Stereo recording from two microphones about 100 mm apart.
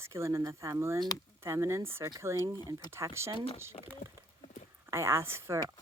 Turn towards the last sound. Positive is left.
turn(degrees=-25)  # may be behind; listen again after turning